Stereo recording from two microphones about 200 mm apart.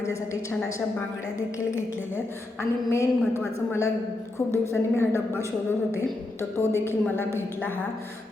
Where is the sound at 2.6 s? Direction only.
15° left (ahead or behind).